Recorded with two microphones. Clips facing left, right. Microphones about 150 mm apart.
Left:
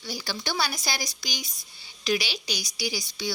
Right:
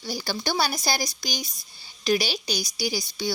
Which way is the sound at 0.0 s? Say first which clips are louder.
Right 4 dB; 40° right (ahead or behind).